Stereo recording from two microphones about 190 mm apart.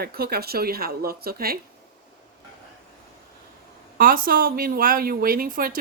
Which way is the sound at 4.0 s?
50° right (ahead or behind).